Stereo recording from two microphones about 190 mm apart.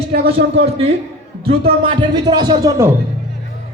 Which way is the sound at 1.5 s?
30° right (ahead or behind).